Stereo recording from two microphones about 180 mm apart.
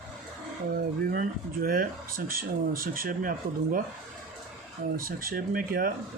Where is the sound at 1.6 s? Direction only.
50° right (ahead or behind).